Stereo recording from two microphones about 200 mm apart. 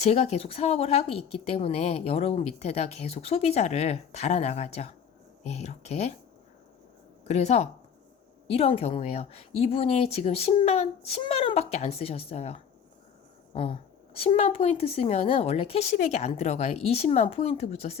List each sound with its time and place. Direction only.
0.0 s speech: 30° left (ahead or behind)
7.3 s speech: 35° left (ahead or behind)